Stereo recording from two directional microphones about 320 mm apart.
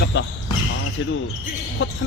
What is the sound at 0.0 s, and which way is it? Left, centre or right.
Basketball bounce, left.